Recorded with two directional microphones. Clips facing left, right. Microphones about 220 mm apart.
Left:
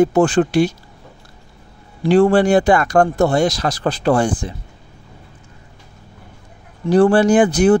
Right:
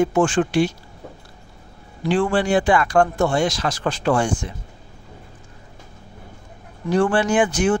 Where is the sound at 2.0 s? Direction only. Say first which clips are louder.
Left 7 dB; 40° left (ahead or behind).